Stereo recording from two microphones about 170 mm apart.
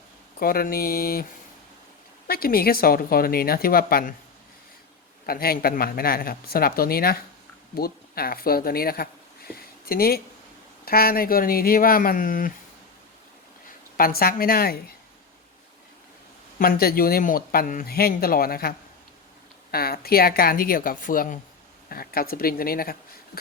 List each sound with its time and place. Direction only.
0.3 s speech: 60° left (ahead or behind)
5.2 s speech: 60° left (ahead or behind)
9.6 s a sound: 60° left (ahead or behind)
10.8 s speech: 65° left (ahead or behind)
13.9 s speech: 60° left (ahead or behind)
16.6 s speech: 60° left (ahead or behind)
19.7 s speech: 60° left (ahead or behind)